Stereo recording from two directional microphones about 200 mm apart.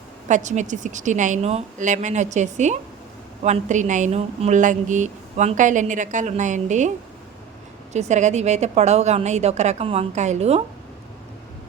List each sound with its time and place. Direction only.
0.3 s speech: 35° right (ahead or behind)
7.9 s speech: 35° right (ahead or behind)